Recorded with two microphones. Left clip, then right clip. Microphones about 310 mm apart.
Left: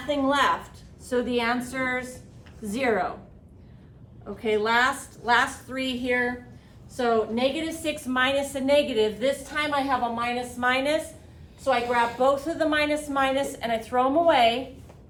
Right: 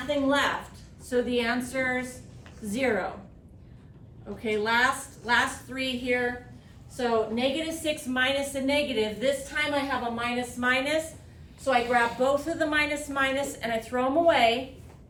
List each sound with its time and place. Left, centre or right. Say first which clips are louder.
0.1 s a woman's voice: left 3 dB; centre
4.4 s a woman's voice: left 2 dB; centre